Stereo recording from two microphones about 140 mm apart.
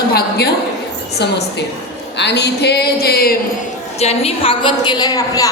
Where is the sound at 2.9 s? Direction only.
90° left.